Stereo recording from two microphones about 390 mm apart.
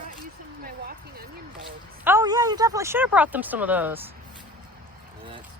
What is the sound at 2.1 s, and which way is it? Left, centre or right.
Speech, centre.